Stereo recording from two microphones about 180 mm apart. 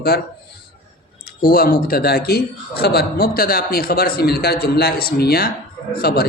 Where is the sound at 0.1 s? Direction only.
60° left (ahead or behind).